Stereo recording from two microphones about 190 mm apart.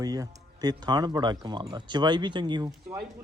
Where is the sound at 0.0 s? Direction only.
20° right (ahead or behind).